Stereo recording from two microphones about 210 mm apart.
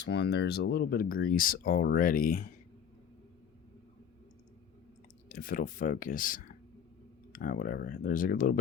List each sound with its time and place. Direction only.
0.0 s speech: 55° left (ahead or behind)
5.3 s speech: 40° left (ahead or behind)